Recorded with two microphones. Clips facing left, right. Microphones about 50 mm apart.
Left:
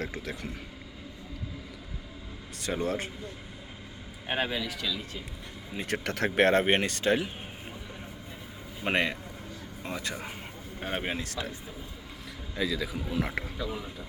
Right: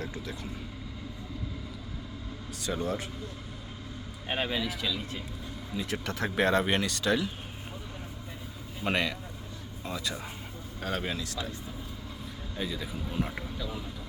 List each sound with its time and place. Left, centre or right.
2.6 s speech: left
4.3 s speech: centre
4.5 s speech: centre
5.7 s speech: left
8.8 s speech: left
10.8 s speech: left
12.5 s speech: left